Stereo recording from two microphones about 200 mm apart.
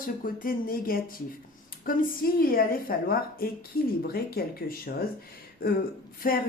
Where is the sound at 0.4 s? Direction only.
45° left (ahead or behind).